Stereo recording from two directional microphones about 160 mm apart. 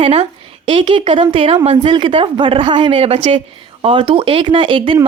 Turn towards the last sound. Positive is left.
turn(degrees=-30)  # may be behind; listen again after turning